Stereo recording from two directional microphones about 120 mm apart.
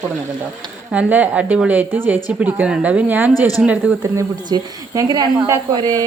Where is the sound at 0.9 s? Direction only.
10° right (ahead or behind).